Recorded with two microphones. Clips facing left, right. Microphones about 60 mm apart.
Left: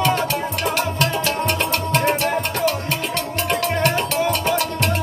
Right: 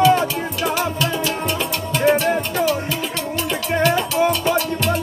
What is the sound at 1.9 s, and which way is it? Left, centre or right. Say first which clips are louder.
Music: right 4 dB; left.